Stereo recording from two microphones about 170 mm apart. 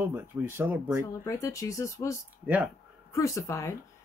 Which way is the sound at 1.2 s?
20° left (ahead or behind).